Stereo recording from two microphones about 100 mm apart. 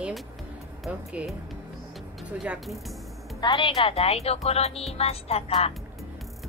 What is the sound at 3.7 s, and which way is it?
Speech, 75° left (ahead or behind).